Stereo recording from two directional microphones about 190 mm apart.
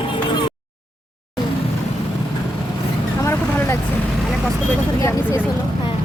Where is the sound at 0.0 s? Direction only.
25° left (ahead or behind).